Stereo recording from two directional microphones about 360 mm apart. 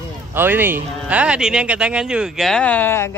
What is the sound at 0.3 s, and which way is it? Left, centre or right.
Speech, centre.